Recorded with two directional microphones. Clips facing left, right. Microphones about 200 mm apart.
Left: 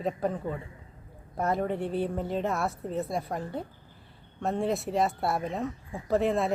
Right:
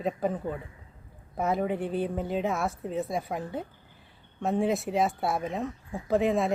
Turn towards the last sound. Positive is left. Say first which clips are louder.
# right 1 dB
turn(degrees=0)  # may be behind; listen again after turning